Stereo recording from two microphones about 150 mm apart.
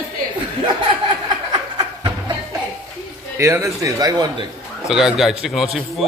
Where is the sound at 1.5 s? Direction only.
30° right (ahead or behind).